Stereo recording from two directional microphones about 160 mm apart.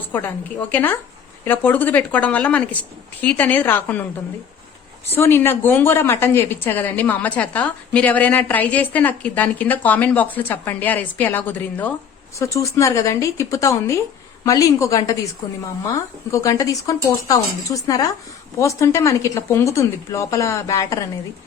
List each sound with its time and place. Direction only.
0.1 s speech: 10° left (ahead or behind)
5.1 s speech: 15° left (ahead or behind)
16.3 s speech: 20° left (ahead or behind)